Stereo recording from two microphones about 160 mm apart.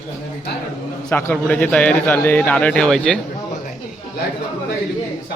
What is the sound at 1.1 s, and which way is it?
Speech, 10° left (ahead or behind).